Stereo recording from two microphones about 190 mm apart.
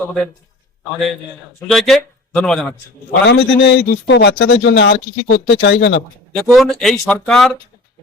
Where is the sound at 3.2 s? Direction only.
65° left (ahead or behind).